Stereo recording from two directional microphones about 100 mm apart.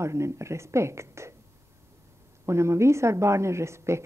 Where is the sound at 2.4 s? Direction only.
30° right (ahead or behind).